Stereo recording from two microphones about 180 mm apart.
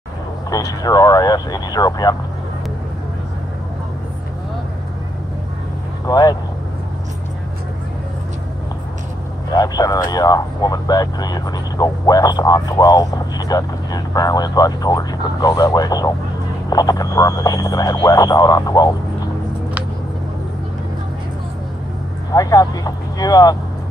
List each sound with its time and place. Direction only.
0.5 s speech: 20° left (ahead or behind)
6.0 s speech: 20° left (ahead or behind)
9.5 s speech: 20° left (ahead or behind)
22.3 s speech: 20° left (ahead or behind)